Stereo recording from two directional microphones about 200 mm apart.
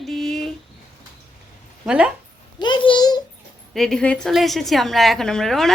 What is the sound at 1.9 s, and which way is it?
Speech, 5° right (ahead or behind).